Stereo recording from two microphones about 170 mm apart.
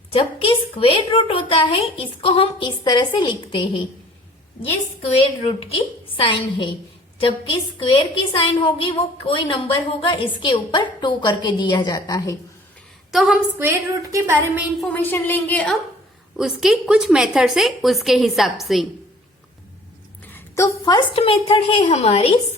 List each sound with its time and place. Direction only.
0.1 s a woman's voice: 35° left (ahead or behind)
5.0 s a woman's voice: 35° left (ahead or behind)
13.1 s a woman's voice: 5° right (ahead or behind)
14.8 s a woman's voice: 10° left (ahead or behind)
20.8 s a woman's voice: 25° left (ahead or behind)
21.2 s a woman's voice: 35° left (ahead or behind)